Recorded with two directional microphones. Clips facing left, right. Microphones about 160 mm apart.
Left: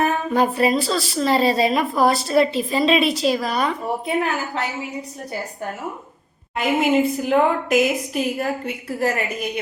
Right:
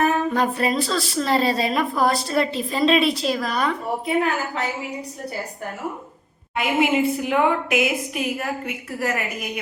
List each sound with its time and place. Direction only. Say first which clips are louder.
0.3 s a woman's voice: left 3 dB; 5° left (ahead or behind)
6.6 s a woman's voice: left 2 dB; 40° left (ahead or behind)